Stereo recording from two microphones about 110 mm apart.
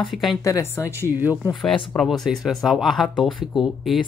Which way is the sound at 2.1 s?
Centre (ahead or behind).